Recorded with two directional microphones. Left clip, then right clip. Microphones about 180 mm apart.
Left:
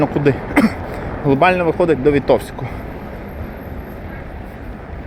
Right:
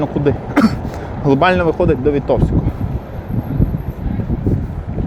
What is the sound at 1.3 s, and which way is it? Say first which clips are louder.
Speech: right 1 dB; 20° right (ahead or behind).